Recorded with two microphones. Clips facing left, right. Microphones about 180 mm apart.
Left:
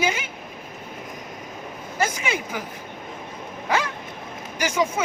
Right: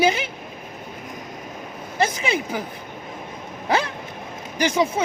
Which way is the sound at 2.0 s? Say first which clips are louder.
Right 3 dB; 30° right (ahead or behind).